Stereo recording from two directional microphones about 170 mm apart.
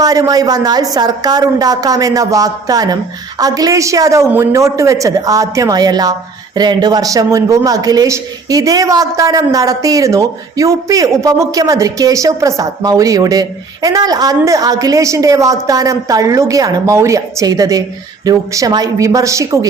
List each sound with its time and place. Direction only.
0.0 s speech: 20° right (ahead or behind)